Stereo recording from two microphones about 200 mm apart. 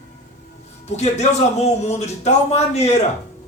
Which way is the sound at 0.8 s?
35° left (ahead or behind).